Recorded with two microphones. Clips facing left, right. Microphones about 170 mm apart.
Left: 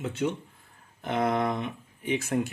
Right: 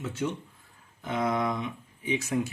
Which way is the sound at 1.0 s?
60° left (ahead or behind).